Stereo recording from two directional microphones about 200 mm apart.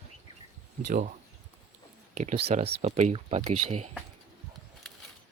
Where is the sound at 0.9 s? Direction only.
40° right (ahead or behind).